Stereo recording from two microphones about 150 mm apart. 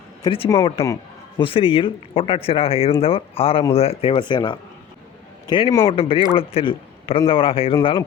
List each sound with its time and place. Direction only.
0.2 s a man's voice: 35° left (ahead or behind)